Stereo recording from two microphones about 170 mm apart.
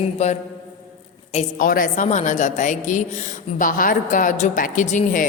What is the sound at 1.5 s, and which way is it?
A woman's voice, 55° left (ahead or behind).